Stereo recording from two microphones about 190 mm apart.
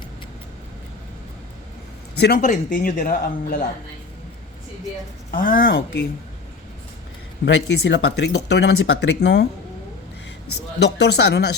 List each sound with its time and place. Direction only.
2.1 s speech: 60° left (ahead or behind)
2.4 s speech: 45° left (ahead or behind)
5.3 s speech: 50° left (ahead or behind)
7.4 s speech: 70° left (ahead or behind)
10.8 s speech: 65° left (ahead or behind)